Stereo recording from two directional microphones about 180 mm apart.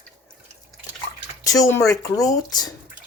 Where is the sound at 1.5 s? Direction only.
15° left (ahead or behind).